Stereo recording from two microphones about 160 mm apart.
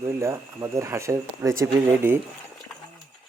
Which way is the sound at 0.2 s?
20° right (ahead or behind).